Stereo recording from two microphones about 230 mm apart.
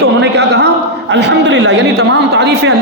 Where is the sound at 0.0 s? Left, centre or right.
Right.